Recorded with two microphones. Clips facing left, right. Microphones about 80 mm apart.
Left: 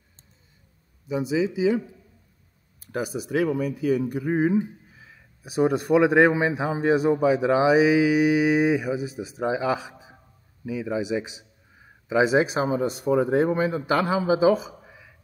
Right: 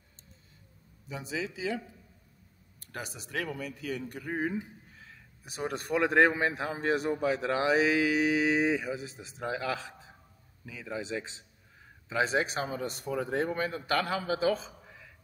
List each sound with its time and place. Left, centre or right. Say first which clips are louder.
1.0 s a man's voice: left 12 dB; centre
2.8 s a man's voice: left 13 dB; centre